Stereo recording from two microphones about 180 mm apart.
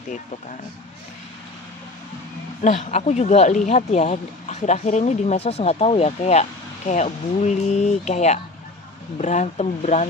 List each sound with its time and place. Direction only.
2.6 s speech: 40° left (ahead or behind)